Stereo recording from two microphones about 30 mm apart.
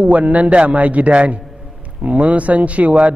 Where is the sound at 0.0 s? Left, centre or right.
Right.